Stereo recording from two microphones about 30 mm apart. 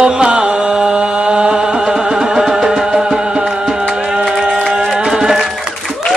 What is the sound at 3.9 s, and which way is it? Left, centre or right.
Music, right.